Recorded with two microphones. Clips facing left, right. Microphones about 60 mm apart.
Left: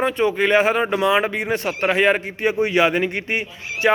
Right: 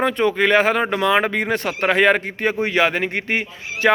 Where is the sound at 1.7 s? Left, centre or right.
Right.